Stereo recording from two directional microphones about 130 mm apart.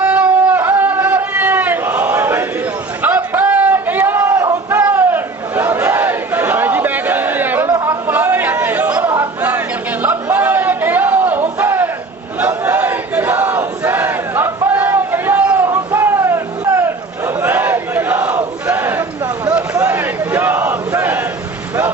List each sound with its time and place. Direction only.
0.0 s a sound: 10° right (ahead or behind)
4.8 s crowd: 15° right (ahead or behind)
7.7 s chatter: 25° right (ahead or behind)
8.0 s chatter: 15° right (ahead or behind)
10.3 s a sound: 15° right (ahead or behind)
12.4 s battle cry: 20° right (ahead or behind)